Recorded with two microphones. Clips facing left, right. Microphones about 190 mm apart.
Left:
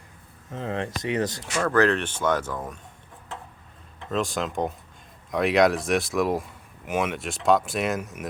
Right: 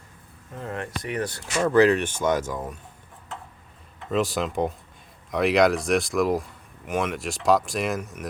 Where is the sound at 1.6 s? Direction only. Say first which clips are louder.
Right 3 dB; 15° right (ahead or behind).